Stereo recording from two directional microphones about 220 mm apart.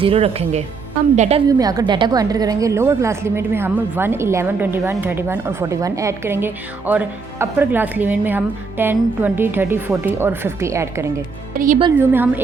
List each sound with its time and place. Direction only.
0.0 s speech: 25° right (ahead or behind)
1.5 s a woman's voice: 15° right (ahead or behind)
11.5 s speech: 40° right (ahead or behind)
11.9 s a woman's voice: 10° right (ahead or behind)